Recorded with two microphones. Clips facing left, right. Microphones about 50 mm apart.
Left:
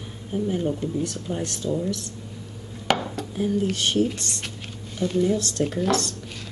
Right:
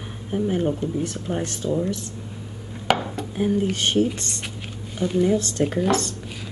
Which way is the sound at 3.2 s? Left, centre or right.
Right.